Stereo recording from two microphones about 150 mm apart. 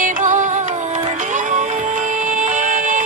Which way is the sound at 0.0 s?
60° right (ahead or behind).